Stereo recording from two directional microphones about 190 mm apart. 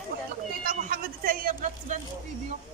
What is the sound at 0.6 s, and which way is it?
Music, 50° right (ahead or behind).